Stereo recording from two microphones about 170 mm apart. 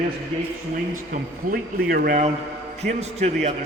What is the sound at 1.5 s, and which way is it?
Speech, 60° right (ahead or behind).